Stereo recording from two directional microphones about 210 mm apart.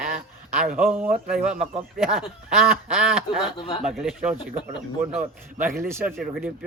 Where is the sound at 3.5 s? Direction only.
20° left (ahead or behind).